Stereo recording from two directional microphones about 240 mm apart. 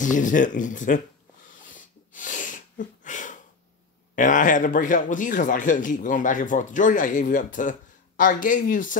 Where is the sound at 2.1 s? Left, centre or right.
Left.